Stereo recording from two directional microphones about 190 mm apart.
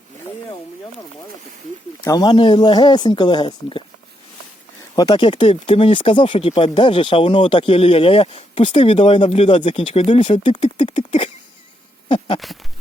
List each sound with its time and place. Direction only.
2.0 s speech: 20° left (ahead or behind)
4.9 s speech: 20° left (ahead or behind)
12.0 s a sound: 30° left (ahead or behind)